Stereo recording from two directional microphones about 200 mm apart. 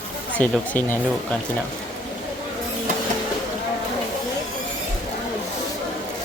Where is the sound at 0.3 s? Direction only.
10° left (ahead or behind).